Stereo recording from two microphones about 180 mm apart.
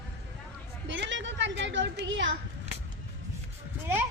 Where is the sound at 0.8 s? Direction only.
90° right.